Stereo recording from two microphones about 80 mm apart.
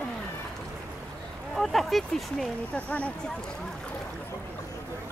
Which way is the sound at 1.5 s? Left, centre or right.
Centre.